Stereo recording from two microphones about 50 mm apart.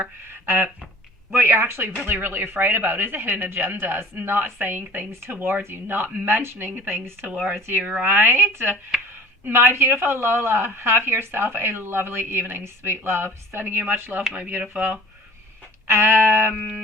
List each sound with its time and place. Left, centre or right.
0.3 s a sound: right
2.0 s a woman's voice: right
7.8 s speech: right
8.0 s a woman's voice: right
8.9 s speech: centre
9.4 s a woman's voice: right
14.6 s speech: right
15.9 s a sound: right